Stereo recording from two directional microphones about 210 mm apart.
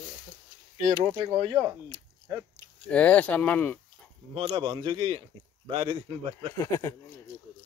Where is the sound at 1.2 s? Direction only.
25° right (ahead or behind).